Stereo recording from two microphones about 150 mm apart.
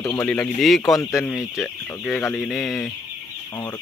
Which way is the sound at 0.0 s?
15° left (ahead or behind).